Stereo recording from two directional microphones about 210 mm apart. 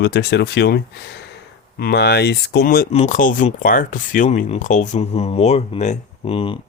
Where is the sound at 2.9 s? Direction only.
35° left (ahead or behind).